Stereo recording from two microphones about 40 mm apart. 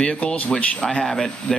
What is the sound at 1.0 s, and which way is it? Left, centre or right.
Speech, centre.